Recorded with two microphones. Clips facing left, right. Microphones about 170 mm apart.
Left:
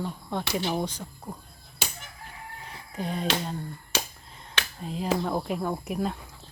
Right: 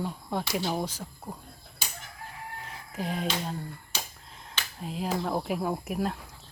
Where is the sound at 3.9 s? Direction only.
75° left (ahead or behind).